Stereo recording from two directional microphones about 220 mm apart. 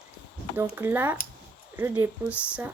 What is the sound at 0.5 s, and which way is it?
Speech, 10° right (ahead or behind).